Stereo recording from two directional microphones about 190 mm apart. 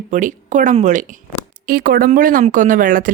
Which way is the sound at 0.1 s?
40° right (ahead or behind).